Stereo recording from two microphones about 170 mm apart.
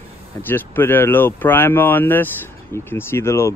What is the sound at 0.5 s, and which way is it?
A man's voice, 10° left (ahead or behind).